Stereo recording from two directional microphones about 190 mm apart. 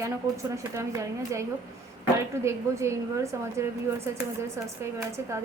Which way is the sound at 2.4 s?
15° right (ahead or behind).